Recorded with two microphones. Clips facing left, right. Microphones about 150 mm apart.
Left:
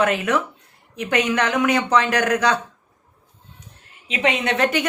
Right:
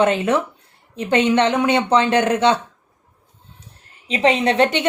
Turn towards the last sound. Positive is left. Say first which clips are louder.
# right 4 dB
turn(degrees=-30)  # may be behind; listen again after turning